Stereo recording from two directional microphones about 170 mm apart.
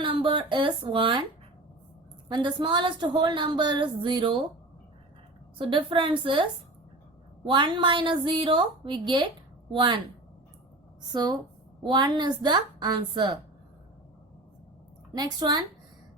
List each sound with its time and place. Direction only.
0.0 s speech: 30° right (ahead or behind)
2.3 s a woman's voice: 25° right (ahead or behind)
5.5 s a woman's voice: 30° right (ahead or behind)
11.1 s a woman's voice: 25° right (ahead or behind)
15.1 s a woman's voice: 25° right (ahead or behind)